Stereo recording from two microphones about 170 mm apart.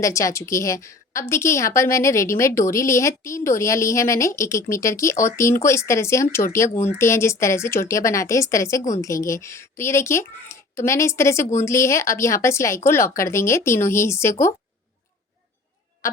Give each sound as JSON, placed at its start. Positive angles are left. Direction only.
{"t": 0.0, "sound": "a woman's voice", "side_deg": 20}